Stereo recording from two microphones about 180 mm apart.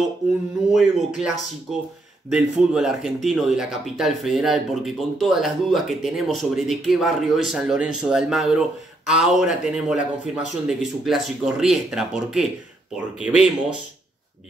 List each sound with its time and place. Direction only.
0.7 s speech: centre (ahead or behind)